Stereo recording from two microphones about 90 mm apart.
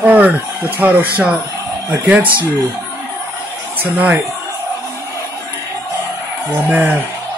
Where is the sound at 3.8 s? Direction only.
15° right (ahead or behind).